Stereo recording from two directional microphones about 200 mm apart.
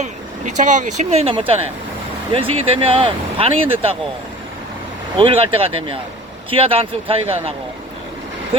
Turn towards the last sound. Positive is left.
turn(degrees=-30)  # may be behind; listen again after turning